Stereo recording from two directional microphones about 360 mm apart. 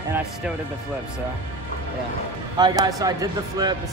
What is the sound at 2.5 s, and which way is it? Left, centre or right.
Speech, centre.